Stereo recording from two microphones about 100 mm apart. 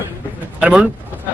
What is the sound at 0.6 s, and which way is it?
Speech, 10° right (ahead or behind).